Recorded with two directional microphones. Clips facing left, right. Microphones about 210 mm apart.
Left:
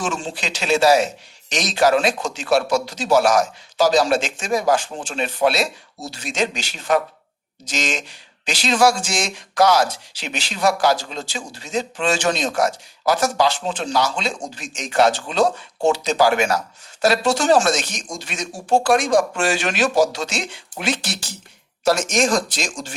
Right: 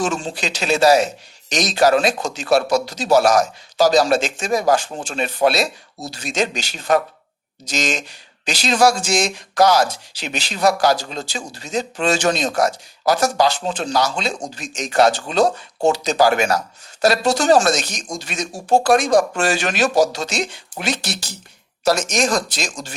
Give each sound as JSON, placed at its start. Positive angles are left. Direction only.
{"t": 0.0, "sound": "speech", "side_deg": -40}